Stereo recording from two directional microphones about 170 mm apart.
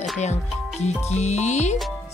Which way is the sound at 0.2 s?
40° left (ahead or behind).